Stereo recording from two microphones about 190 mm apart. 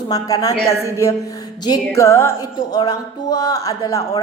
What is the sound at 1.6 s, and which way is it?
Music, 20° left (ahead or behind).